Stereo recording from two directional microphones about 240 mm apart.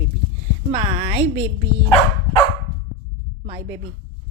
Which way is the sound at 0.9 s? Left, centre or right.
Right.